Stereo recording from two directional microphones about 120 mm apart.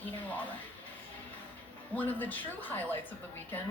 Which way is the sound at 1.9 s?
15° left (ahead or behind).